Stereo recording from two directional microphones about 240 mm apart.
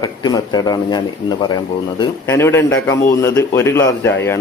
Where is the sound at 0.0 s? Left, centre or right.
Centre.